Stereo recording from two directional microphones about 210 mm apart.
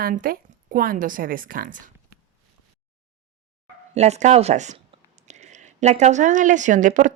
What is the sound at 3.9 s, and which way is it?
A woman's voice, 30° right (ahead or behind).